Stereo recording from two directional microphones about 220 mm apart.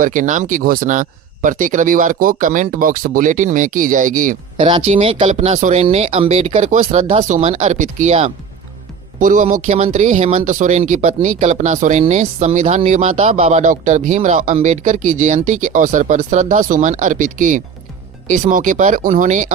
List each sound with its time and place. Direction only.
0.0 s speech: 35° right (ahead or behind)
4.5 s speech: 20° right (ahead or behind)